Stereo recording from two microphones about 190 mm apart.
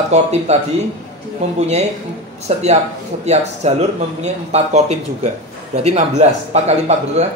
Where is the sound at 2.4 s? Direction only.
35° right (ahead or behind).